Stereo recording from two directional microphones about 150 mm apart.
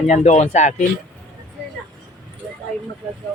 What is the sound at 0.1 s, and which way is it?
Speech, 50° left (ahead or behind).